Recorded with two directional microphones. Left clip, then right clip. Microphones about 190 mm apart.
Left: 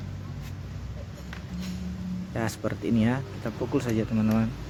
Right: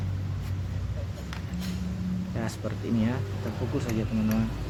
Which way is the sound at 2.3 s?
40° left (ahead or behind).